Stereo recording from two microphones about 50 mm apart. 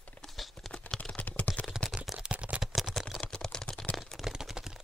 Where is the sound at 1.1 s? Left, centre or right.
Left.